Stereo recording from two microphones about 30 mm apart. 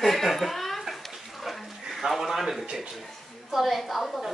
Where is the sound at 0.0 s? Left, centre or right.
Centre.